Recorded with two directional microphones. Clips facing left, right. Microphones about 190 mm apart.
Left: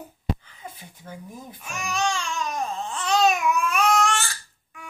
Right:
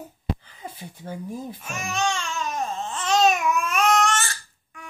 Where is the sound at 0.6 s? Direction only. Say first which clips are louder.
Right 2 dB; 30° right (ahead or behind).